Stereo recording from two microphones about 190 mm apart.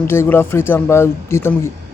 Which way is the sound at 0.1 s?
10° left (ahead or behind).